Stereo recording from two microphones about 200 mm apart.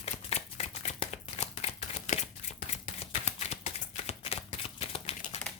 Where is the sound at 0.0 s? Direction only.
30° left (ahead or behind).